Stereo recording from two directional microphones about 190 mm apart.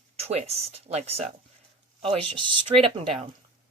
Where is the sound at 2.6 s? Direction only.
30° right (ahead or behind).